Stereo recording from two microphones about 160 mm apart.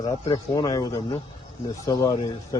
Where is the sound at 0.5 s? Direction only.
25° left (ahead or behind).